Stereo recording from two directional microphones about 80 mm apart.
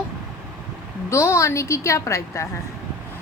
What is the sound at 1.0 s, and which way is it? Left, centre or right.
Speech, left.